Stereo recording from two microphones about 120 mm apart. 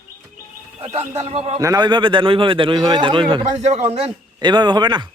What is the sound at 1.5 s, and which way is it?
Speech, 35° right (ahead or behind).